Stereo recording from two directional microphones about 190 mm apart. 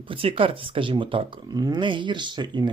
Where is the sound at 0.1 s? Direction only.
30° right (ahead or behind).